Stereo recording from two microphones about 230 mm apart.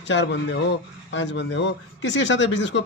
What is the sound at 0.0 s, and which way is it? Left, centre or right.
A man's voice, left.